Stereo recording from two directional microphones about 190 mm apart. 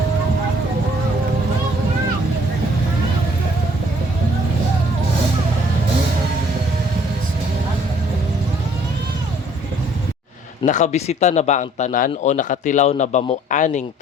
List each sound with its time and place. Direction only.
10.7 s speech: 40° left (ahead or behind)